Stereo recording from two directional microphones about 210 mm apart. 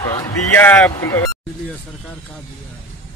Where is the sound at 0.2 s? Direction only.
10° left (ahead or behind).